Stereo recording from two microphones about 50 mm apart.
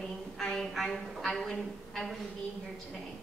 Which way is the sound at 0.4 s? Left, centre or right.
Centre.